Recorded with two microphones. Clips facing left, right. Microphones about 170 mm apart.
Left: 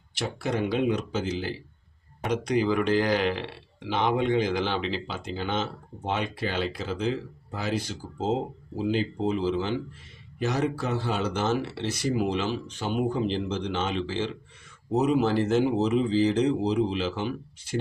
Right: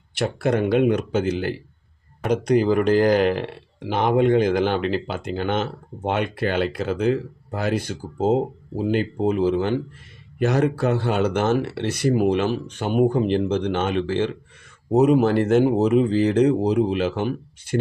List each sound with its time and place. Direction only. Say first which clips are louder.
0.1 s speech: right 8 dB; 60° right (ahead or behind)
2.2 s speech: right 6 dB; 50° right (ahead or behind)